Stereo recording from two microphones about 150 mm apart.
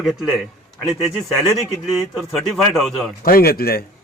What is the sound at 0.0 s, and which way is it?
A man's voice, 5° right (ahead or behind).